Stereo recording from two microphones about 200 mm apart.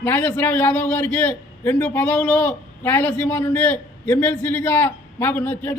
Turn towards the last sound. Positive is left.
turn(degrees=10)  # may be behind; listen again after turning